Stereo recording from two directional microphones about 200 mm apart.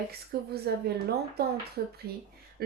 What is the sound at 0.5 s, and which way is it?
Speech, 55° right (ahead or behind).